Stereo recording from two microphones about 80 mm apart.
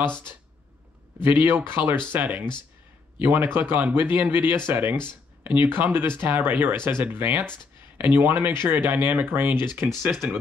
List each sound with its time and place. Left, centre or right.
1.2 s speech: right